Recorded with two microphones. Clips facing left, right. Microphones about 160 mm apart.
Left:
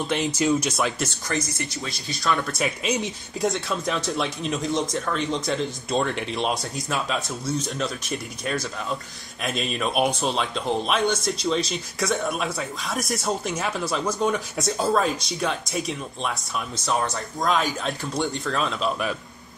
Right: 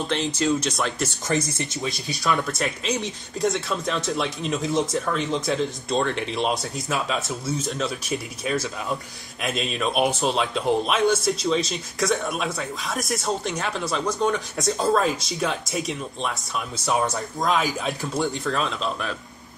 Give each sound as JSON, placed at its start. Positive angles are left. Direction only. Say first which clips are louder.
{"t": 0.1, "sound": "speech", "louder": "left 1 dB", "side_deg": 10}
{"t": 1.6, "sound": "speech", "louder": "right 3 dB", "side_deg": -20}
{"t": 2.0, "sound": "speech", "louder": "even", "side_deg": 0}